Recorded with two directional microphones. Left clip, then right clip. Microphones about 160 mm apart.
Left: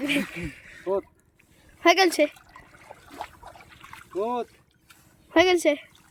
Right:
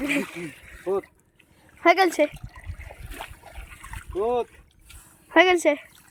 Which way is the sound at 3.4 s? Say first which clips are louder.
Right 1 dB; 65° right (ahead or behind).